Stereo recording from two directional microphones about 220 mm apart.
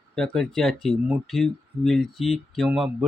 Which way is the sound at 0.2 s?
Centre (ahead or behind).